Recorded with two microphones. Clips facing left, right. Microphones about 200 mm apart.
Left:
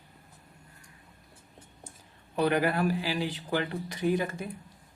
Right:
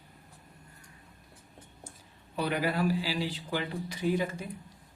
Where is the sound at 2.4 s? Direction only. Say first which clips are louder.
Left 4 dB; 55° left (ahead or behind).